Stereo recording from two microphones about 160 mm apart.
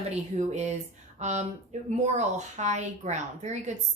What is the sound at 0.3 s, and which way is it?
A woman's voice, 45° right (ahead or behind).